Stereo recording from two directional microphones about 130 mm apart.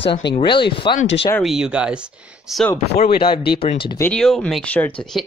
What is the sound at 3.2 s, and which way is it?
Speech, 45° left (ahead or behind).